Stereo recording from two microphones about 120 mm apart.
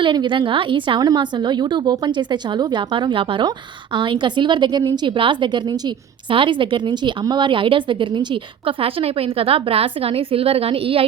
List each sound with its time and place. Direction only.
0.0 s a woman's voice: 40° right (ahead or behind)